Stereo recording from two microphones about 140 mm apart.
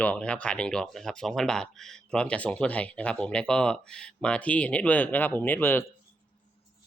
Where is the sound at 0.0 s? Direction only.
10° left (ahead or behind).